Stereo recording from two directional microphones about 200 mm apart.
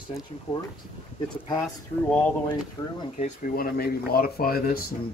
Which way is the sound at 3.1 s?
40° left (ahead or behind).